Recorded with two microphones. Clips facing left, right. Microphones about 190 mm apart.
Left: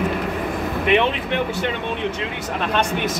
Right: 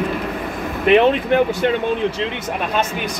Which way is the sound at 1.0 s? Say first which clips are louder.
Right 6 dB; 40° right (ahead or behind).